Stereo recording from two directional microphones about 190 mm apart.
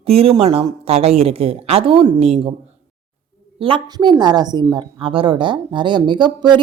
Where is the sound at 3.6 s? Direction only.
25° right (ahead or behind).